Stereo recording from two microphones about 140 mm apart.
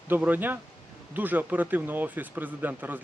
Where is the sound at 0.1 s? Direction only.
15° right (ahead or behind).